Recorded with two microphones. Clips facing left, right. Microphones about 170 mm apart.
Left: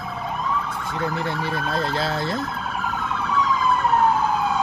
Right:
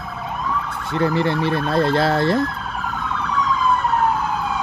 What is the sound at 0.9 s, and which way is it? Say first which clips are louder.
Emergency vehicle: right 8 dB; 70° right (ahead or behind).